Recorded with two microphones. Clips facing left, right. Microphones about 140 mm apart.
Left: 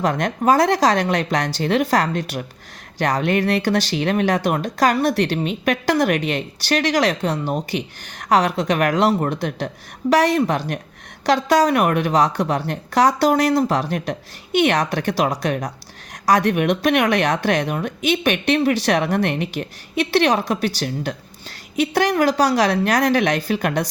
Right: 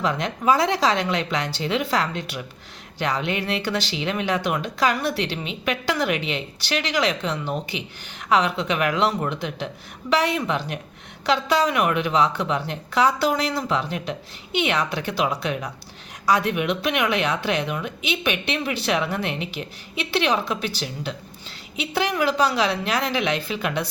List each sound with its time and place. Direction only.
0.0 s speech: 45° left (ahead or behind)